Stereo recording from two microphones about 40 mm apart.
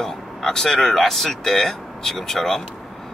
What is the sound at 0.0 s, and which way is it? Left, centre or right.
Speech, centre.